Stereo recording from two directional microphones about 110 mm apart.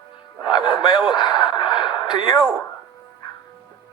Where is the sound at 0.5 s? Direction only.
45° left (ahead or behind).